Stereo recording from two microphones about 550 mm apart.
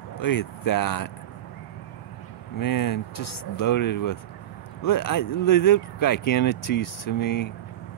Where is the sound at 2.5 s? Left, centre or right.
Left.